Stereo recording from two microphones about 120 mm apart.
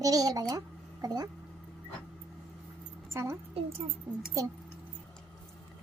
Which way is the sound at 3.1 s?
25° right (ahead or behind).